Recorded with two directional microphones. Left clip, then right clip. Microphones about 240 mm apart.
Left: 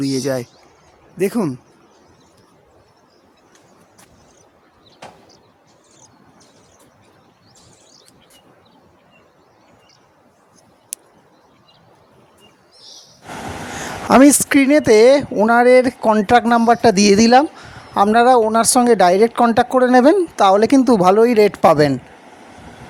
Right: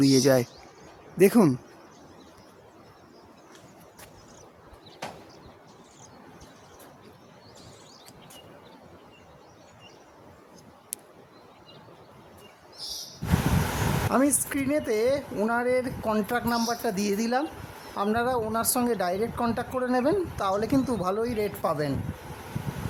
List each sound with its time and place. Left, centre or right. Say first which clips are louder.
0.0 s speech: even; centre
5.0 s a sound: even; centre
14.1 s speech: left 17 dB; right